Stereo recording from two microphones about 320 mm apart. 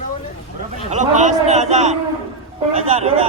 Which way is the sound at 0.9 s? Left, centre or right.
Right.